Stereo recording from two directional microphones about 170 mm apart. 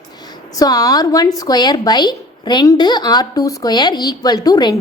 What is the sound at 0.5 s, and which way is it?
Speech, 20° left (ahead or behind).